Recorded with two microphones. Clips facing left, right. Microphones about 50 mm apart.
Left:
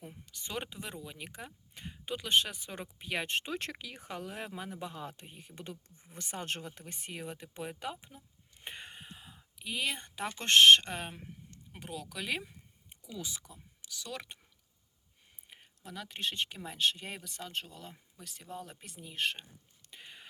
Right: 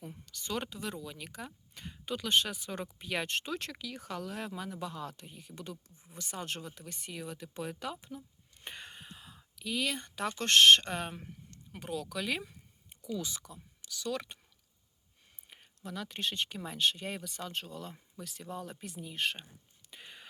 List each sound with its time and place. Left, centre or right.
0.0 s speech: centre
3.4 s speech: left
7.5 s speech: centre
15.4 s speech: centre
19.9 s whispering: centre